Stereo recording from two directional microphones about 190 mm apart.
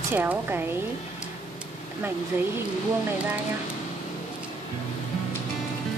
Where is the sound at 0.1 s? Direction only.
10° right (ahead or behind).